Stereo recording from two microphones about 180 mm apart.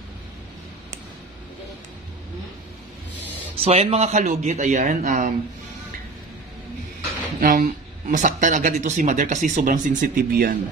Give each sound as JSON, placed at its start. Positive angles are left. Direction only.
{"t": 3.5, "sound": "a man's voice", "side_deg": -35}
{"t": 7.3, "sound": "speech", "side_deg": -50}